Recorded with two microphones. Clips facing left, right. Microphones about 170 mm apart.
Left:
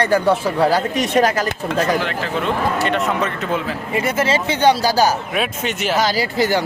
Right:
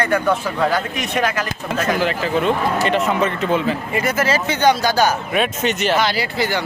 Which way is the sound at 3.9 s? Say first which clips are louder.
Left 3 dB; 25° left (ahead or behind).